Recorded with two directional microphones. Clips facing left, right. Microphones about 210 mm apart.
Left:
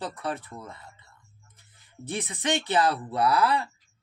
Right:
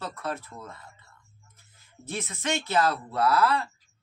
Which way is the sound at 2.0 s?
15° left (ahead or behind).